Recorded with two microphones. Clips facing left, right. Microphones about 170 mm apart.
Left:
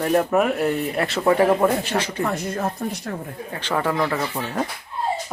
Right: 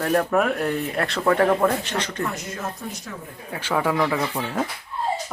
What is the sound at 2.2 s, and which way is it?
Speech, 55° left (ahead or behind).